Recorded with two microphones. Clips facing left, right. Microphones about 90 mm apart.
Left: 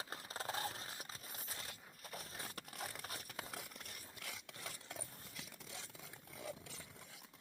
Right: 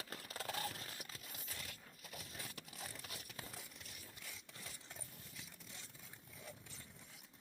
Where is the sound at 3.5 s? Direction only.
65° left (ahead or behind); by 6.8 s 90° left.